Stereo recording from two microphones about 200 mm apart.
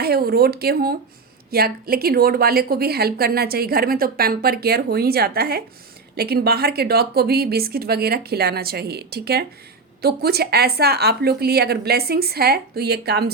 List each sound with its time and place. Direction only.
0.0 s a woman's voice: 50° right (ahead or behind)